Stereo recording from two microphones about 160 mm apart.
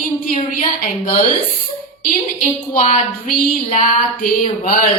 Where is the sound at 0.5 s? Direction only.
60° left (ahead or behind).